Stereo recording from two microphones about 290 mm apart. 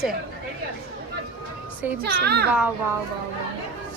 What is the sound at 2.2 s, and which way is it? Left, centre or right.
Speech, right.